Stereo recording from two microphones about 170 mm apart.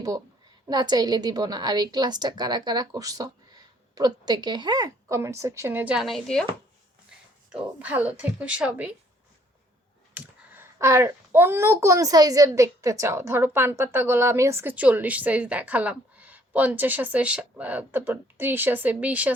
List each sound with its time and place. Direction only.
0.7 s a woman's voice: 25° right (ahead or behind); by 6.5 s 5° left (ahead or behind)
7.5 s a child's voice: 10° right (ahead or behind)
10.2 s a child's voice: 10° right (ahead or behind)